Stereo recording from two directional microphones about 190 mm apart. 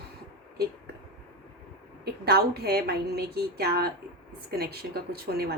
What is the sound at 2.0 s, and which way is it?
A woman's voice, 55° right (ahead or behind).